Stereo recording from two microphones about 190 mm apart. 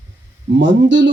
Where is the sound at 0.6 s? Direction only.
70° right (ahead or behind).